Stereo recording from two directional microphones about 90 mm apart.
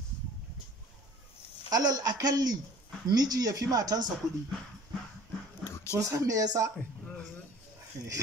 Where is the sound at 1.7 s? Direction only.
45° right (ahead or behind).